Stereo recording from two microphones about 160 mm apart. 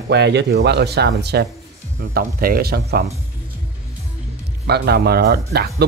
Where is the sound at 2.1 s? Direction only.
70° right (ahead or behind).